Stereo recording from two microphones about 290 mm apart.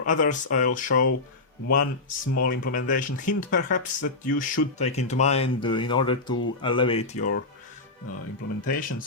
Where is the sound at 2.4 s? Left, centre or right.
Left.